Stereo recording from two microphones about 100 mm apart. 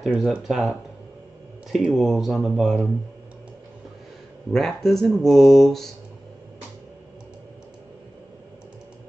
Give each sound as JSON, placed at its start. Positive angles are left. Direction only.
{"t": 0.2, "sound": "speech", "side_deg": 0}
{"t": 4.5, "sound": "speech", "side_deg": 5}